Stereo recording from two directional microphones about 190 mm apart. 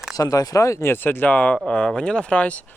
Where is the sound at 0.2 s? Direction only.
20° left (ahead or behind).